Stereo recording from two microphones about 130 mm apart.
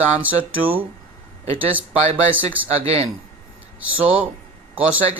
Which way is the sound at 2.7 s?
50° right (ahead or behind).